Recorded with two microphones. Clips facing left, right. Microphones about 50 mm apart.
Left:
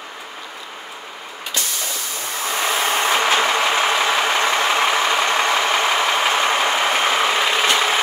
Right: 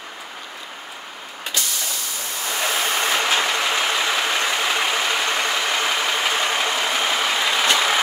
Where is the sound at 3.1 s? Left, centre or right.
Left.